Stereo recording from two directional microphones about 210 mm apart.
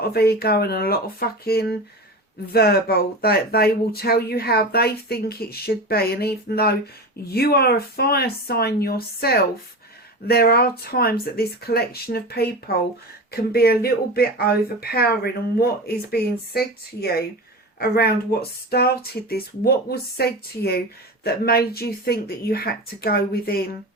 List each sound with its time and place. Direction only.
0.1 s speech: 50° left (ahead or behind)